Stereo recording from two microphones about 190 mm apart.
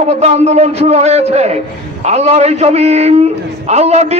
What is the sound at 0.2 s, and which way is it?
A man's voice, 35° right (ahead or behind).